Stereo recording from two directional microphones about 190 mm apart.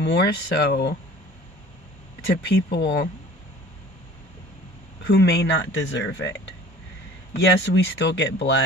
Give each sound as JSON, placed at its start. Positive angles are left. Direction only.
{"t": 0.0, "sound": "speech", "side_deg": 65}
{"t": 2.4, "sound": "speech", "side_deg": 60}
{"t": 5.0, "sound": "speech", "side_deg": 60}
{"t": 7.3, "sound": "speech", "side_deg": 65}